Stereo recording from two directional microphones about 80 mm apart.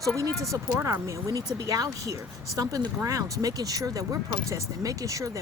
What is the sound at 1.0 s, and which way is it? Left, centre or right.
Speech, right.